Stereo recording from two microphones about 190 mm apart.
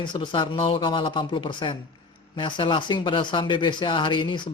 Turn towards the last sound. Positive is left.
turn(degrees=25)  # may be behind; listen again after turning